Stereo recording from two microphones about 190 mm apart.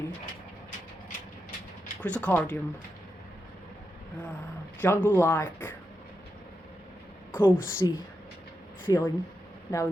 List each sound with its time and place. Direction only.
2.0 s speech: 5° left (ahead or behind)
4.8 s speech: 10° left (ahead or behind)
7.3 s speech: 10° left (ahead or behind)